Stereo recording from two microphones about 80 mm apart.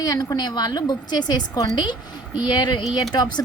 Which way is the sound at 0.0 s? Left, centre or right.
Left.